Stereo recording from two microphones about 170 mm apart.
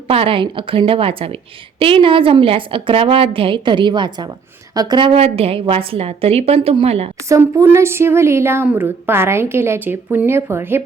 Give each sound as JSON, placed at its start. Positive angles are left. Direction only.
{"t": 0.1, "sound": "a woman's voice", "side_deg": -35}
{"t": 7.3, "sound": "a woman's voice", "side_deg": -20}